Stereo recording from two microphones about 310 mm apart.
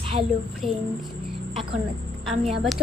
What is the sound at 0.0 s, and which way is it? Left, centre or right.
Child singing, centre.